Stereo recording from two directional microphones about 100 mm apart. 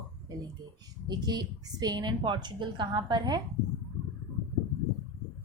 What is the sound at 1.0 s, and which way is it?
A woman's voice, 45° right (ahead or behind).